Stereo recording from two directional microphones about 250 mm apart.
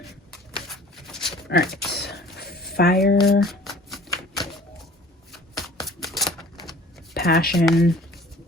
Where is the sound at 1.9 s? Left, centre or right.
Left.